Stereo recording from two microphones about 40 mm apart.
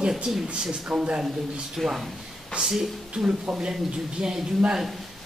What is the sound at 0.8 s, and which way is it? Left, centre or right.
Speech, right.